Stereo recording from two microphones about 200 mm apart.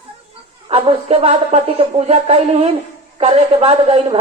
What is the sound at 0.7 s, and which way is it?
Speech, 30° right (ahead or behind).